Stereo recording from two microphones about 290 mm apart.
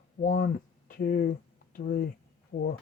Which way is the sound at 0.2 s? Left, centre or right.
Left.